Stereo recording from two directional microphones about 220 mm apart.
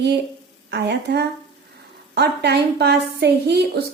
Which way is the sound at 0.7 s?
50° right (ahead or behind).